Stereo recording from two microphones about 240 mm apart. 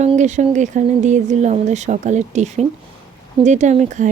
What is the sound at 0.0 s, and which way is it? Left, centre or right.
Speech, right.